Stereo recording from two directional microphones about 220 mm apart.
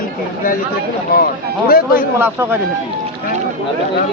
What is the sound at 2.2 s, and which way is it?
Speech, 10° right (ahead or behind).